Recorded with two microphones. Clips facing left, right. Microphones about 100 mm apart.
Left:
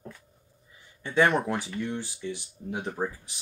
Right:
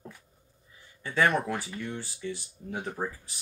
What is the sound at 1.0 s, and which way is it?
Speech, 20° left (ahead or behind).